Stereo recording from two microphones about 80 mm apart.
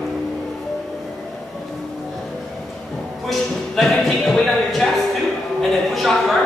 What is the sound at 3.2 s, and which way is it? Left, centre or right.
Music, centre.